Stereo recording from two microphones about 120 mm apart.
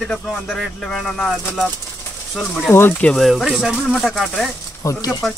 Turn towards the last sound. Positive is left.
turn(degrees=30)  # may be behind; listen again after turning